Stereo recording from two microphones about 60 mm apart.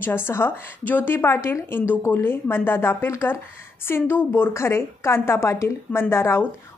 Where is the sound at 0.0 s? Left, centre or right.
Left.